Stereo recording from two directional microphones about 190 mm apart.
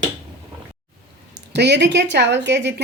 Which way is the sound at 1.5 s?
65° right (ahead or behind).